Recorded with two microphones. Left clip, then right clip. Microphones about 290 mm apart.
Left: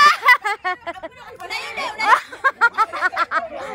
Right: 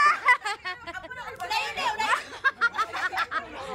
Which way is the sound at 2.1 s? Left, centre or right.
Centre.